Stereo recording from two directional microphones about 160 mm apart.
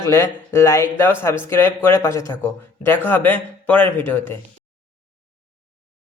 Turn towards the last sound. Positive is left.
turn(degrees=15)  # may be behind; listen again after turning